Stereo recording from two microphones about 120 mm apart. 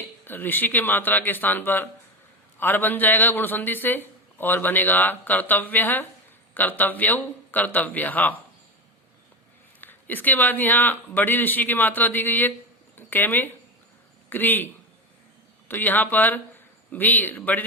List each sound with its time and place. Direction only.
0.3 s speech: 15° left (ahead or behind)
9.8 s a man's voice: 15° left (ahead or behind)
15.7 s speech: 15° left (ahead or behind)